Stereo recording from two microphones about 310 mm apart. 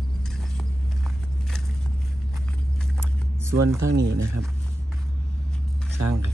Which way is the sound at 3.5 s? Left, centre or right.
Right.